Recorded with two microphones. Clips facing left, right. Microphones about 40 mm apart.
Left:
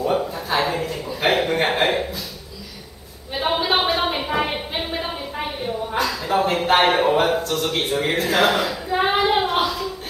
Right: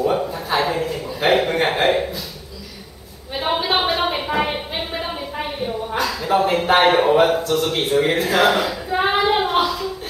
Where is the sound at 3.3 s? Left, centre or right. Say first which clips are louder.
Even; centre.